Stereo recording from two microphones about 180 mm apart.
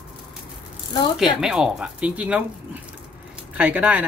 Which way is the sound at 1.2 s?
5° right (ahead or behind).